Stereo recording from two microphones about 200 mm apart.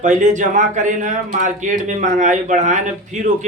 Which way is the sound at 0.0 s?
40° right (ahead or behind).